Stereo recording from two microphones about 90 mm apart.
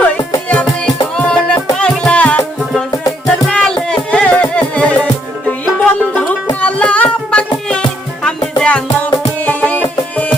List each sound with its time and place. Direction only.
0.4 s music: 10° left (ahead or behind)
3.5 s music: 5° left (ahead or behind)
6.6 s child singing: 15° left (ahead or behind)
8.5 s music: 10° left (ahead or behind)